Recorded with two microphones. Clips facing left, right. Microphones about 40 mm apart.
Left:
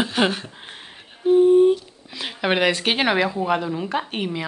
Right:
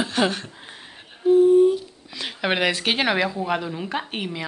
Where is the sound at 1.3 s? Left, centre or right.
Left.